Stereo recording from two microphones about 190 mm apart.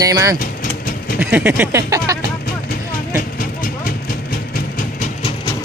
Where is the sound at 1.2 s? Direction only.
10° right (ahead or behind).